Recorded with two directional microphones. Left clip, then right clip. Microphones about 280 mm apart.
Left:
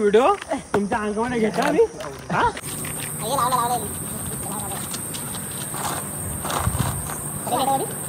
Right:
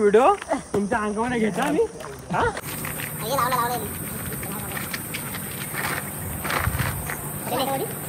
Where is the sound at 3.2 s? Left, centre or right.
Centre.